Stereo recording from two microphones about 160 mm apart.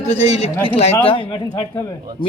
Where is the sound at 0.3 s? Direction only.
45° left (ahead or behind).